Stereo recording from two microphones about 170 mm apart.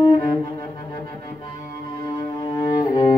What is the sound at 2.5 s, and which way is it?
Cello, 20° left (ahead or behind).